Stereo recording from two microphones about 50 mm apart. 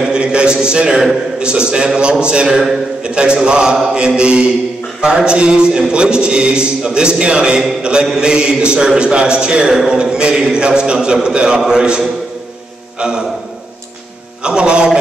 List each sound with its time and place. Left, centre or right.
0.0 s a man's voice: centre
13.0 s a man's voice: centre
14.4 s a sound: centre